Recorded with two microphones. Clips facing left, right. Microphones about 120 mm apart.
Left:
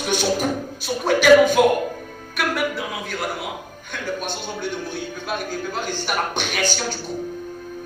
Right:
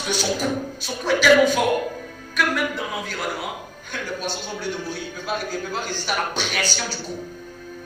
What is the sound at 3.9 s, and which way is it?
A man's voice, 50° left (ahead or behind).